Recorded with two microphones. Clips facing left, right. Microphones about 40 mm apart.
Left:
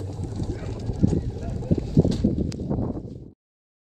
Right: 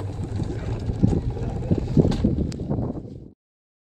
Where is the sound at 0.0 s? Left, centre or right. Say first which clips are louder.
Right 1 dB; right.